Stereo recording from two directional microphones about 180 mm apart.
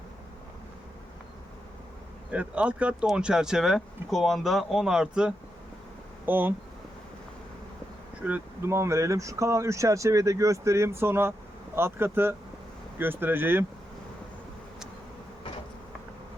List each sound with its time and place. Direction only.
2.3 s speech: 5° right (ahead or behind)
8.2 s speech: 10° right (ahead or behind)